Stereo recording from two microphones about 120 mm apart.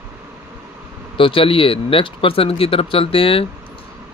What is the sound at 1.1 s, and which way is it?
Speech, 45° left (ahead or behind).